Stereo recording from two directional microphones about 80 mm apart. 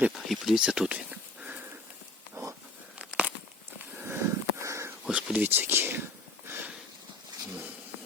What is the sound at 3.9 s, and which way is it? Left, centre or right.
Sniff, right.